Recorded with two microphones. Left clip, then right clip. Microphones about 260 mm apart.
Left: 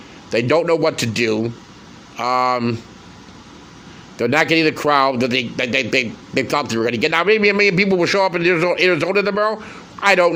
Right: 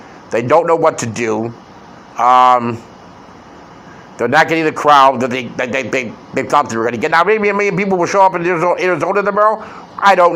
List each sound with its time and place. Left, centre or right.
0.3 s a man's voice: left
4.2 s a man's voice: left